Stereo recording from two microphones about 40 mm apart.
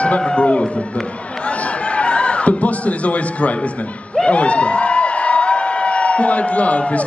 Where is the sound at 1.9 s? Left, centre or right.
Left.